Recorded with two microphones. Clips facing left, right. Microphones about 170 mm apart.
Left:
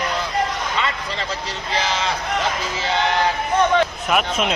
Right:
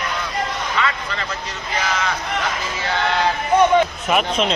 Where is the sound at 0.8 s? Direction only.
30° left (ahead or behind).